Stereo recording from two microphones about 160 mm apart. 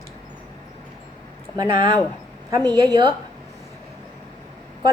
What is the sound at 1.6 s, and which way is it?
A woman's voice, 25° right (ahead or behind).